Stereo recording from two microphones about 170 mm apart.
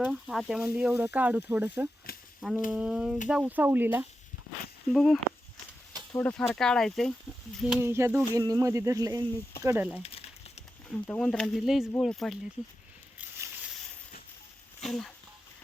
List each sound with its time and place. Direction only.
0.0 s speech: 5° right (ahead or behind)
2.1 s a sound: 60° left (ahead or behind)
2.6 s speech: 5° right (ahead or behind)
4.9 s speech: centre (ahead or behind)
6.1 s speech: 10° left (ahead or behind)
7.9 s speech: 15° right (ahead or behind)
10.0 s a sound: 35° left (ahead or behind)
10.8 s speech: 5° left (ahead or behind)
14.8 s speech: 5° left (ahead or behind)